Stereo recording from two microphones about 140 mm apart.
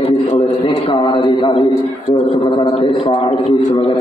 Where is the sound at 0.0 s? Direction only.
50° left (ahead or behind).